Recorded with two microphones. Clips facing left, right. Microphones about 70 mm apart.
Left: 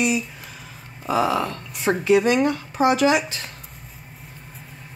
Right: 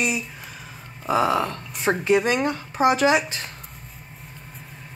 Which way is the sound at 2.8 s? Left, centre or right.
Right.